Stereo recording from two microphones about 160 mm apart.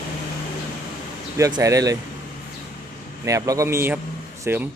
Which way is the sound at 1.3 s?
20° right (ahead or behind).